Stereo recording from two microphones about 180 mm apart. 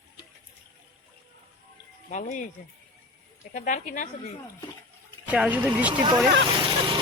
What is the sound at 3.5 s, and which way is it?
Speech, 45° left (ahead or behind).